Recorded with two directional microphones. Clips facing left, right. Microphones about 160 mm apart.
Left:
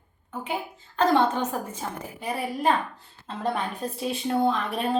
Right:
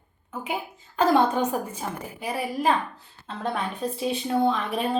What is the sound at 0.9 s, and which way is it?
A woman's voice, 10° right (ahead or behind).